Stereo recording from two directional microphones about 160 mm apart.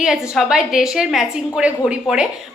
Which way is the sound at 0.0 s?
5° right (ahead or behind).